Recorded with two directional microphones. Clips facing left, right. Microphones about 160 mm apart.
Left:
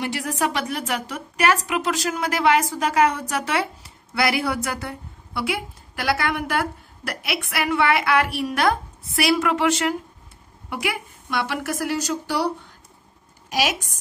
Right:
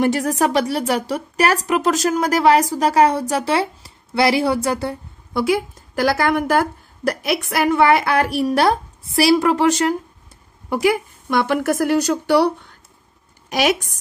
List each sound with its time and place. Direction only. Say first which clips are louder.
0.0 s a woman's voice: right 7 dB; 45° right (ahead or behind)
5.3 s a woman's voice: right 8 dB; 40° right (ahead or behind); by 12.4 s 65° right (ahead or behind)
13.5 s a woman's voice: right 6 dB; 55° right (ahead or behind)